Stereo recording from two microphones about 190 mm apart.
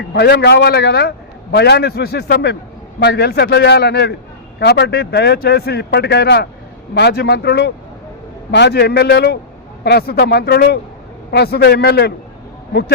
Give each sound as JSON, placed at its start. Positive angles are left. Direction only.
{"t": 0.1, "sound": "speech", "side_deg": 60}